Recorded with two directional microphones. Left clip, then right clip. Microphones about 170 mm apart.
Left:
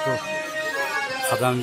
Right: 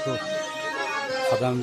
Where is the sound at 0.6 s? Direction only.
45° left (ahead or behind).